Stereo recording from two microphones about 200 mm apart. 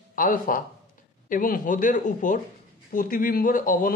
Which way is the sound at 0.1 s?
45° left (ahead or behind).